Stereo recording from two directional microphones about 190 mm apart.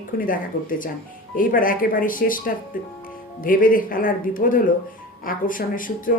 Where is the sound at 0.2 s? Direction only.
45° left (ahead or behind).